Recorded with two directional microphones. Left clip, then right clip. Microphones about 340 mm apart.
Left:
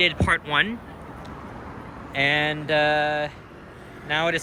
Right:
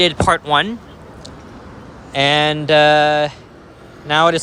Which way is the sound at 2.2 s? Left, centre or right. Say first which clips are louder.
Right 8 dB; centre.